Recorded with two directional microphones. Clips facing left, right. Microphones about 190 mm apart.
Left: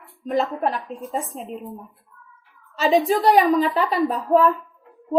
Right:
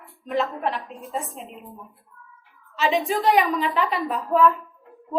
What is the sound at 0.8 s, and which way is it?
Speech, centre (ahead or behind).